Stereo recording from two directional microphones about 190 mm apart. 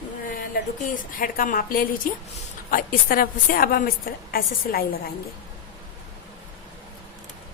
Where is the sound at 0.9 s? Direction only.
50° left (ahead or behind).